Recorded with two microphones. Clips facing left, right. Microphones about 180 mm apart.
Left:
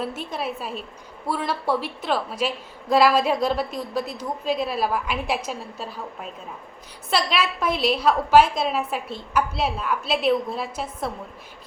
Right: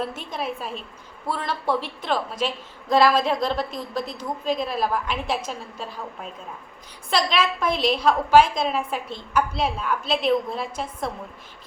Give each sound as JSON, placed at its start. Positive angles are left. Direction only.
{"t": 0.0, "sound": "a woman's voice", "side_deg": 5}